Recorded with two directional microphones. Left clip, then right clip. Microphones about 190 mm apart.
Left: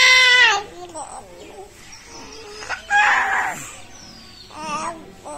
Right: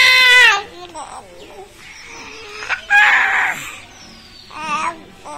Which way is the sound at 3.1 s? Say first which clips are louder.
Right 4 dB; centre (ahead or behind).